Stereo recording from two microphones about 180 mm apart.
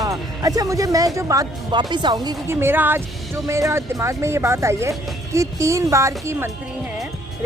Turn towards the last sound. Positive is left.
turn(degrees=-15)  # may be behind; listen again after turning